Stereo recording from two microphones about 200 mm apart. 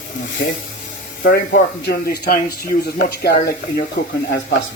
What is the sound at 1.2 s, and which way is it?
Speech, 55° left (ahead or behind).